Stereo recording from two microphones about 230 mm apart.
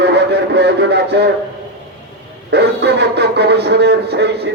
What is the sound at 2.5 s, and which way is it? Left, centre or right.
Speech, right.